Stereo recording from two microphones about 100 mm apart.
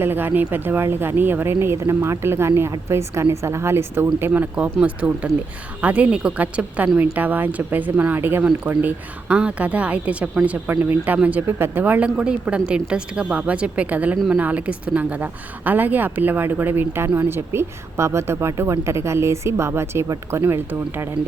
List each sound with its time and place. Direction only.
0.0 s speech: 20° right (ahead or behind)
4.3 s speech: 15° right (ahead or behind)